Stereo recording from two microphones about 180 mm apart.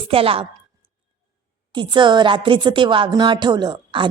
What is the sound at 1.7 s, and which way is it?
A woman's voice, 25° right (ahead or behind).